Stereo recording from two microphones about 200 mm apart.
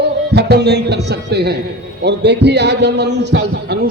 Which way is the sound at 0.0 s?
55° right (ahead or behind).